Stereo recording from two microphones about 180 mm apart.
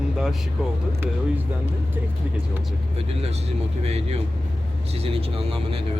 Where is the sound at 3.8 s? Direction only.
35° right (ahead or behind).